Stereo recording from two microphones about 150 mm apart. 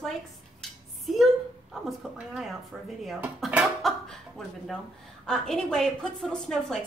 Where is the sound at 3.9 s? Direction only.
Centre (ahead or behind).